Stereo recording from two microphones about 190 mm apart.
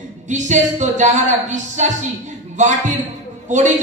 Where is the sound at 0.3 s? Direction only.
40° right (ahead or behind).